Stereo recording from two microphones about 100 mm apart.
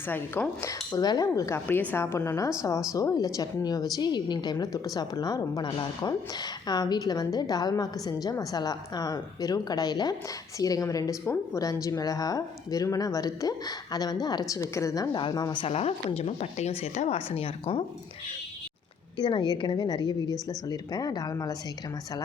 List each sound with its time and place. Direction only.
0.1 s speech: 20° left (ahead or behind)
0.7 s a woman's voice: 40° left (ahead or behind)
1.6 s speech: 20° left (ahead or behind)
2.1 s a woman's voice: 30° left (ahead or behind)
15.1 s a woman's voice: 45° left (ahead or behind)
15.6 s speech: 90° left; by 17.8 s 70° left (ahead or behind)
19.1 s a woman's voice: 50° left (ahead or behind)